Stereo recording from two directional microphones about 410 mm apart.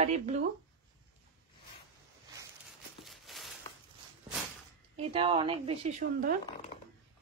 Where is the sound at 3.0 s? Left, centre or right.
Centre.